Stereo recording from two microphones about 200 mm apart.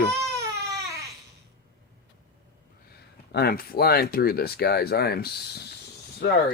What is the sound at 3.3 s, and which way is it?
Speech, 50° left (ahead or behind).